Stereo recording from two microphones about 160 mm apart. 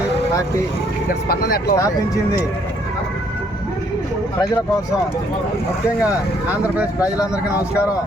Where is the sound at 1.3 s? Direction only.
75° left (ahead or behind).